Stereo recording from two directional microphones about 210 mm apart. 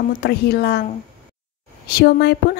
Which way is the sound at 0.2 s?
50° left (ahead or behind).